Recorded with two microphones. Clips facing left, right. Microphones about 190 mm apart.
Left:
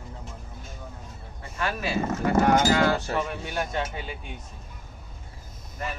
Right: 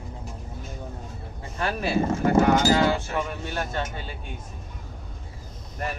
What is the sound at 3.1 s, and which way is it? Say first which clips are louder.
Speech: even; 5° left (ahead or behind).